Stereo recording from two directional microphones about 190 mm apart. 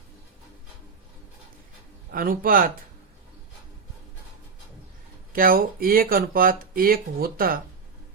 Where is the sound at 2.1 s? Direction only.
50° right (ahead or behind).